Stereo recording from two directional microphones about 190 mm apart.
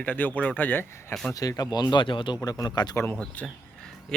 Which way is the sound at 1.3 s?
20° left (ahead or behind).